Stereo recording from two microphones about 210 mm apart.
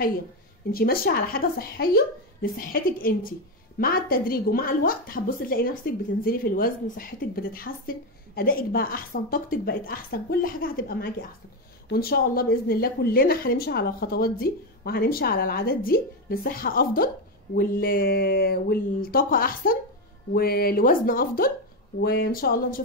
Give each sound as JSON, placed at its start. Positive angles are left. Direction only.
{"t": 0.7, "sound": "a woman's voice", "side_deg": 45}